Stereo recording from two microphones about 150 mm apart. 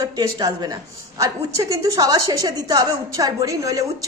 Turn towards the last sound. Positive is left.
turn(degrees=-25)  # may be behind; listen again after turning